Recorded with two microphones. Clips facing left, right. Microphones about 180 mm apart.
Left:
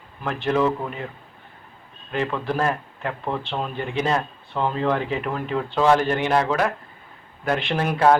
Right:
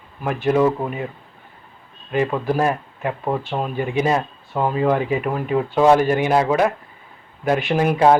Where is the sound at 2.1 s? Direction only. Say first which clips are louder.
Right 5 dB; 15° right (ahead or behind).